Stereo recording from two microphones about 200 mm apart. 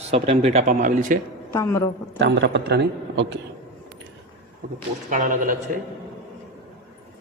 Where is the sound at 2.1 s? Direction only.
65° right (ahead or behind).